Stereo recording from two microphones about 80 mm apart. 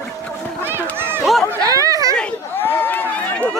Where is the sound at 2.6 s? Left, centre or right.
Left.